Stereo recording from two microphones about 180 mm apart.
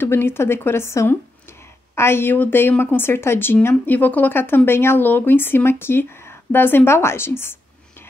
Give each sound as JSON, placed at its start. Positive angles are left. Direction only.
{"t": 0.0, "sound": "a woman's voice", "side_deg": 15}